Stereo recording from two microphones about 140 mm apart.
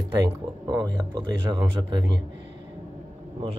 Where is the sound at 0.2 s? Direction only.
30° right (ahead or behind).